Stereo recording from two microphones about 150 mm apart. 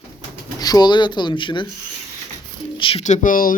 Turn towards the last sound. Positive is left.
turn(degrees=65)  # may be behind; listen again after turning